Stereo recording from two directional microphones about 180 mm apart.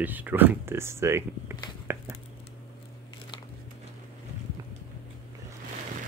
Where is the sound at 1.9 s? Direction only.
15° right (ahead or behind).